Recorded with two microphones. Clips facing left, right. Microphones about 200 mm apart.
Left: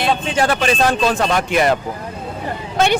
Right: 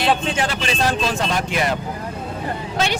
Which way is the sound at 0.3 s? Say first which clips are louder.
Left 6 dB; 50° left (ahead or behind).